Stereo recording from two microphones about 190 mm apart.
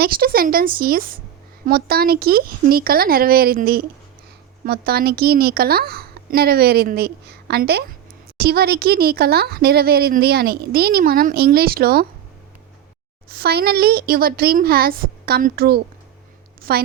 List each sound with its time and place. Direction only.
0.0 s a woman's voice: 50° right (ahead or behind)
13.3 s a woman's voice: 55° right (ahead or behind)